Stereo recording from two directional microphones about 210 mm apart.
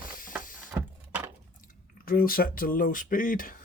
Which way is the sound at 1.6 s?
45° left (ahead or behind).